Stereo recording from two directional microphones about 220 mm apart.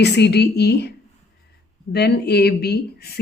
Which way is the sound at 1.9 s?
50° left (ahead or behind).